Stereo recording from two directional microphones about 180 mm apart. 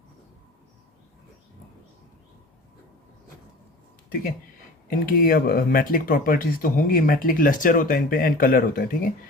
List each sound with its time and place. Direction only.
4.1 s speech: 55° left (ahead or behind)